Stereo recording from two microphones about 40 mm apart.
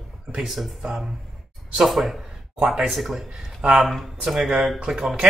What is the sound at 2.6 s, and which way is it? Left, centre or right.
Speech, centre.